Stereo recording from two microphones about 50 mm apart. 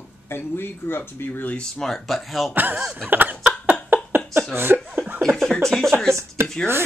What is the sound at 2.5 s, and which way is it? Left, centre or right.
Speech, right.